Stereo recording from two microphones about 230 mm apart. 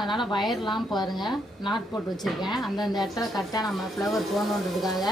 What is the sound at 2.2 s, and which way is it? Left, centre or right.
A woman's voice, centre.